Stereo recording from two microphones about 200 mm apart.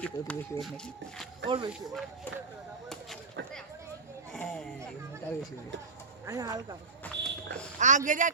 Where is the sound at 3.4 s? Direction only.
65° right (ahead or behind).